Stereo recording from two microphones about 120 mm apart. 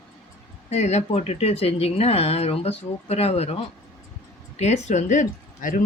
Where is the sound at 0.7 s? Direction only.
70° left (ahead or behind).